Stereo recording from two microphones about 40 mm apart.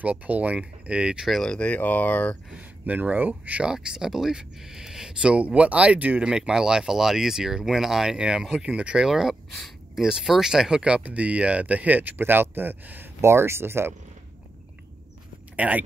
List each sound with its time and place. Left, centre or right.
0.0 s speech: right
1.8 s speech: left
2.8 s speech: right
3.6 s speech: centre
5.2 s speech: right
6.2 s speech: centre
8.7 s speech: right
9.1 s speech: centre
11.0 s speech: right
13.2 s speech: right
15.5 s speech: right